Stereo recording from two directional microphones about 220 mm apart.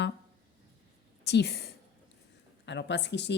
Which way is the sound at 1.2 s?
50° left (ahead or behind).